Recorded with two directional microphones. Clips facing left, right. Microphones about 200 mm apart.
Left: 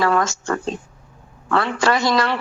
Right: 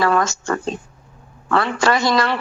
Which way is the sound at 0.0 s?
60° right (ahead or behind).